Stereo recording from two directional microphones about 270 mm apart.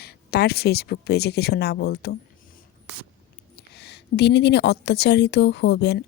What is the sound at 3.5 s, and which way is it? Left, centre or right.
A woman's voice, left.